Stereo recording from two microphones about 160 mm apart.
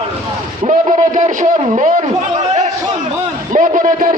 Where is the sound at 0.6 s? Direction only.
50° right (ahead or behind).